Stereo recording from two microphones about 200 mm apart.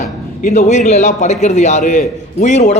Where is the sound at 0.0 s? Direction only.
35° left (ahead or behind).